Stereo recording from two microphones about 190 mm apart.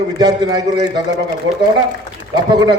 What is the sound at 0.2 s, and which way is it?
Speech, 20° right (ahead or behind).